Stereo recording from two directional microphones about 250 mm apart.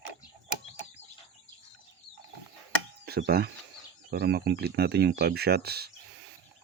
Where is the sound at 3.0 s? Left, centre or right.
Right.